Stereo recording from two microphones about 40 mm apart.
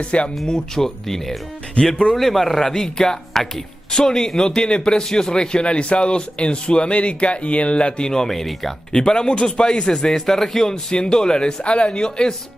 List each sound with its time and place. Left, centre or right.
0.0 s a man's voice: left
0.5 s a man's voice: centre
1.8 s a man's voice: left
2.1 s a man's voice: centre
8.9 s a man's voice: left